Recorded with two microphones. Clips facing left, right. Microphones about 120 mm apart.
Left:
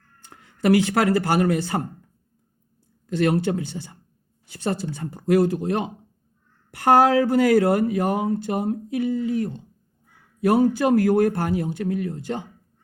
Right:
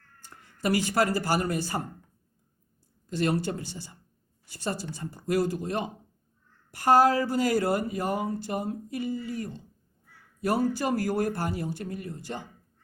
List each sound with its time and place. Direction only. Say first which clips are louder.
0.3 s speech: left 9 dB; 70° left (ahead or behind)
3.1 s speech: left 6 dB; 60° left (ahead or behind)